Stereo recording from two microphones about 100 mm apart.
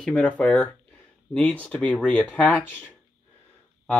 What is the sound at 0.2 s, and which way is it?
Speech, 15° left (ahead or behind).